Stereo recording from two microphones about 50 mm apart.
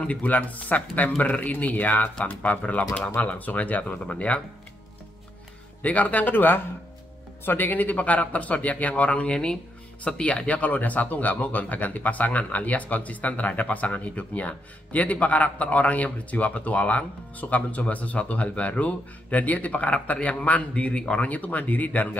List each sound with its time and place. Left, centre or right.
0.0 s a man's voice: left
5.8 s a man's voice: left